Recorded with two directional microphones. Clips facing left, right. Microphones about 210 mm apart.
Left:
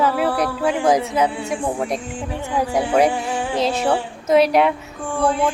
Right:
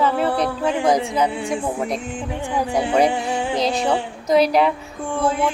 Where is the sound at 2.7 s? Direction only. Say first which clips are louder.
Left 1 dB; 5° left (ahead or behind).